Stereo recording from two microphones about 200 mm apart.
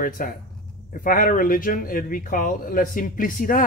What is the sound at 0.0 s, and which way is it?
Speech, 45° left (ahead or behind).